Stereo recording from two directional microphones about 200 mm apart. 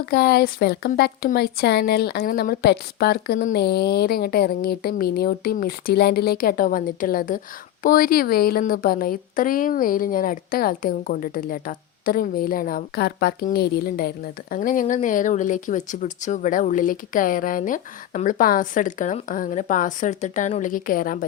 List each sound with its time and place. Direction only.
0.0 s a woman's voice: 50° left (ahead or behind)